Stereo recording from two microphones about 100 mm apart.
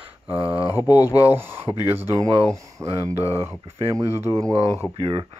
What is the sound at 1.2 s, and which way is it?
Speech, 20° right (ahead or behind).